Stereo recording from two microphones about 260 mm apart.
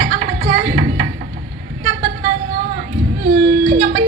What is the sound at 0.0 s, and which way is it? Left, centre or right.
Music, right.